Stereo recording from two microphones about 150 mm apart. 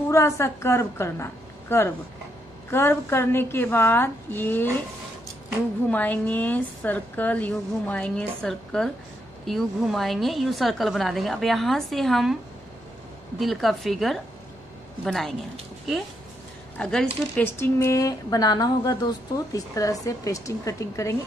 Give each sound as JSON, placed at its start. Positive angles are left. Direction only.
{"t": 0.1, "sound": "a woman's voice", "side_deg": 15}
{"t": 5.9, "sound": "a woman's voice", "side_deg": 10}
{"t": 13.4, "sound": "a woman's voice", "side_deg": 0}
{"t": 16.7, "sound": "speech", "side_deg": 5}